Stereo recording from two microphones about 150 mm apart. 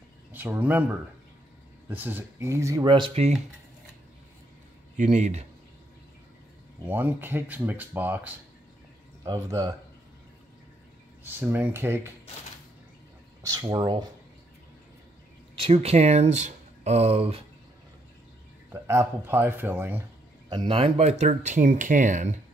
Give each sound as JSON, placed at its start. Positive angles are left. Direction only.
{"t": 0.3, "sound": "speech", "side_deg": -10}
{"t": 2.9, "sound": "speech", "side_deg": -40}
{"t": 4.9, "sound": "speech", "side_deg": -50}
{"t": 6.9, "sound": "speech", "side_deg": -15}
{"t": 9.2, "sound": "speech", "side_deg": -25}
{"t": 11.2, "sound": "speech", "side_deg": -15}
{"t": 13.4, "sound": "speech", "side_deg": -20}
{"t": 15.5, "sound": "speech", "side_deg": -40}
{"t": 18.7, "sound": "speech", "side_deg": -20}
{"t": 20.4, "sound": "speech", "side_deg": -35}